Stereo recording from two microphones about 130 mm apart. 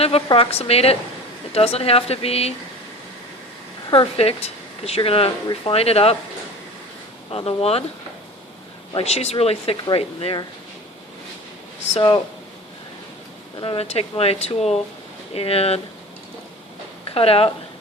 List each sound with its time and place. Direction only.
0.3 s speech: 45° left (ahead or behind)
3.8 s speech: 45° left (ahead or behind)
7.3 s speech: 45° left (ahead or behind)
8.9 s speech: 50° left (ahead or behind)
11.9 s speech: 45° left (ahead or behind)
13.6 s speech: 45° left (ahead or behind)
17.2 s speech: 45° left (ahead or behind)